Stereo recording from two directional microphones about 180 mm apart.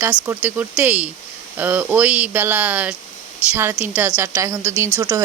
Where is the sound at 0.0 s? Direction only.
10° right (ahead or behind).